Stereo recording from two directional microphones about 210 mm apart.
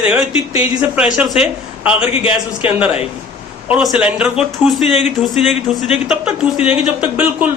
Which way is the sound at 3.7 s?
5° right (ahead or behind).